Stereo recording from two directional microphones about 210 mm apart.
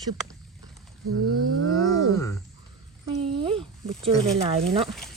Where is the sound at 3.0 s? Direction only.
25° right (ahead or behind).